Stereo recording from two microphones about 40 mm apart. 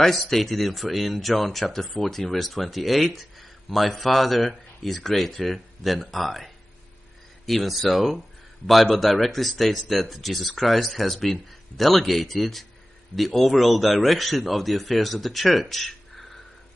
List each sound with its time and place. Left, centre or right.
0.0 s speech: centre